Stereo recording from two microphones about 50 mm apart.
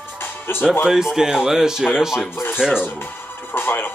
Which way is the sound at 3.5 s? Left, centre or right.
Left.